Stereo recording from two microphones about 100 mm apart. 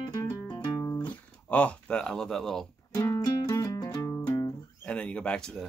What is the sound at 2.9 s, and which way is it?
Music, 30° left (ahead or behind).